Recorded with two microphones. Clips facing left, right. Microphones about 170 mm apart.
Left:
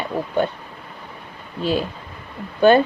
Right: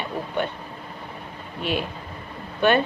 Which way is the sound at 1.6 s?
35° left (ahead or behind).